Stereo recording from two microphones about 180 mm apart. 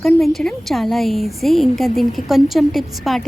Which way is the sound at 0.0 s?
Centre (ahead or behind).